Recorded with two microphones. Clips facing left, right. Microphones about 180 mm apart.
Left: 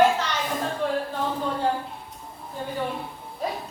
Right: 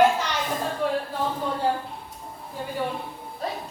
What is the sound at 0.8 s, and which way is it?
Speech, centre (ahead or behind).